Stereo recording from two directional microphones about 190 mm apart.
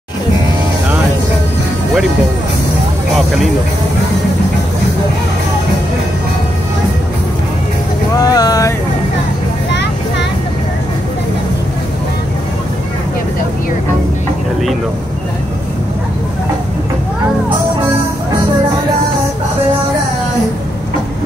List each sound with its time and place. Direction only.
8.2 s vehicle: 20° left (ahead or behind)